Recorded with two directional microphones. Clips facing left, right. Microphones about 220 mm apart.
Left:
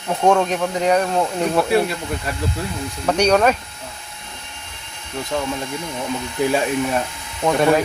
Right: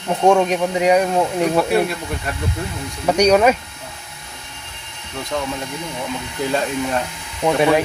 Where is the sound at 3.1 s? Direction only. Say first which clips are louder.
Right 2 dB; 10° right (ahead or behind).